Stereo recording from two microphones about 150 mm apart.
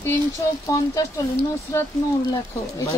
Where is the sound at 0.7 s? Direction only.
25° left (ahead or behind).